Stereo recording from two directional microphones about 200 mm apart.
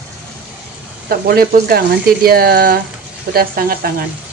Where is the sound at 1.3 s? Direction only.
50° right (ahead or behind).